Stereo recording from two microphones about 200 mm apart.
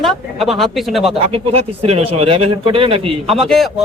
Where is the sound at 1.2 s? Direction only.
30° right (ahead or behind).